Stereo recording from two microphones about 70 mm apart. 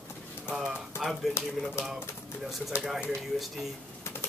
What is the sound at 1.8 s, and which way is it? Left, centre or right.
Speech, left.